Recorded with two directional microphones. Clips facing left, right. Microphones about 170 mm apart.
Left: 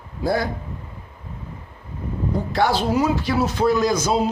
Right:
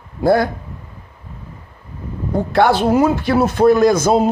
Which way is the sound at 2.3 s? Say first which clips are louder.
Right 7 dB; 60° right (ahead or behind).